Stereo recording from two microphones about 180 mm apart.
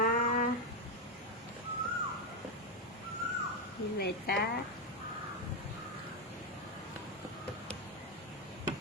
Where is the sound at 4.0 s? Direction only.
60° left (ahead or behind).